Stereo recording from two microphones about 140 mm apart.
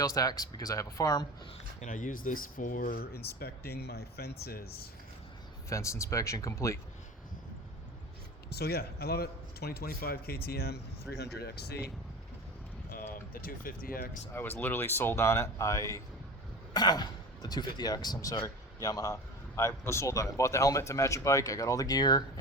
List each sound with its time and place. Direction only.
0.0 s speech: 25° left (ahead or behind)
1.8 s speech: 65° left (ahead or behind); by 4.9 s 90° left
5.6 s speech: 20° left (ahead or behind)
8.6 s speech: 90° left
11.1 s speech: 5° left (ahead or behind)
13.3 s speech: 90° left
14.3 s speech: 15° left (ahead or behind)